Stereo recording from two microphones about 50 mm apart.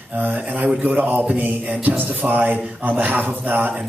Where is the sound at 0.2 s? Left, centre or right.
Right.